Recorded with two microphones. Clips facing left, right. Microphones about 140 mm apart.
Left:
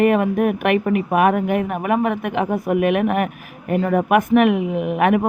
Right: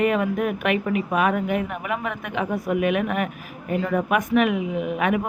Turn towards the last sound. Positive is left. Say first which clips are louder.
# left 5 dB
turn(degrees=55)  # may be behind; listen again after turning